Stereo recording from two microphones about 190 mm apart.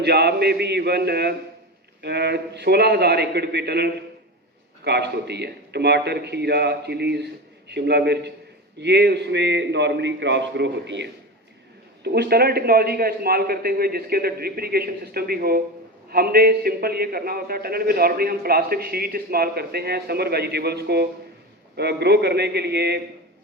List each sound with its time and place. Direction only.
0.0 s a man's voice: 60° right (ahead or behind)